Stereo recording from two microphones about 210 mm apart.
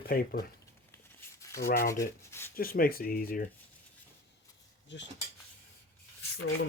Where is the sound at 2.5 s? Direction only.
45° left (ahead or behind).